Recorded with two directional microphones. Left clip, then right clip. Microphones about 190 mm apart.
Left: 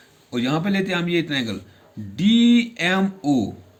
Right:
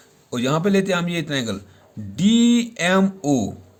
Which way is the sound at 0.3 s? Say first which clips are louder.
Right 3 dB; 65° right (ahead or behind).